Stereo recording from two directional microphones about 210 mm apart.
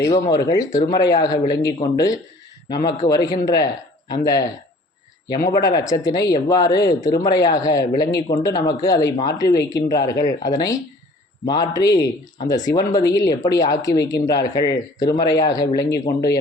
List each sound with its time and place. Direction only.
0.0 s a man's voice: 15° left (ahead or behind)